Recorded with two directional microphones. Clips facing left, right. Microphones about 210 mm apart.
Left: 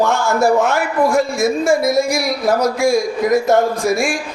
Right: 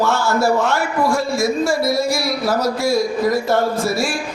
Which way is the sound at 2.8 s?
50° left (ahead or behind).